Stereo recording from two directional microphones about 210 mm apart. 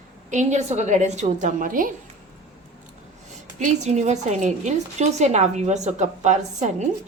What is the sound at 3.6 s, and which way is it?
A woman's voice, 35° right (ahead or behind).